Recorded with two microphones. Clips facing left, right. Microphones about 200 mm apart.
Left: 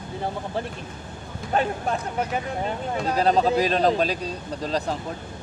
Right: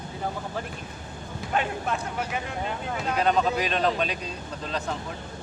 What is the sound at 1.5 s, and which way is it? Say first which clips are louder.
Speech: left 4 dB; 35° left (ahead or behind).